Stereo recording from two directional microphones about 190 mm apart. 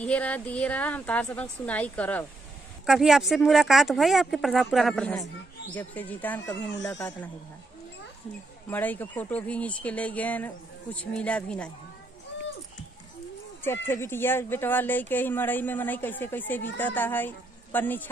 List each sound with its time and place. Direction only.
0.0 s speech: 5° left (ahead or behind)
2.9 s speech: centre (ahead or behind); by 7.1 s 20° left (ahead or behind)
8.6 s speech: 10° left (ahead or behind)
13.7 s speech: 10° left (ahead or behind)